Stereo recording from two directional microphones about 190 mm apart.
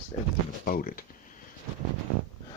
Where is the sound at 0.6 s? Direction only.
45° left (ahead or behind).